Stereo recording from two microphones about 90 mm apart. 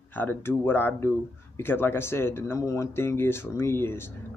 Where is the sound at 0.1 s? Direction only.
25° left (ahead or behind).